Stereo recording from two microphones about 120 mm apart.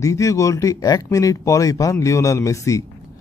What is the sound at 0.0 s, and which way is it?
Speech, 25° left (ahead or behind).